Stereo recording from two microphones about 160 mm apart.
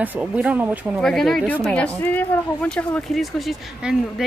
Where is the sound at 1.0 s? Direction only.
Centre (ahead or behind).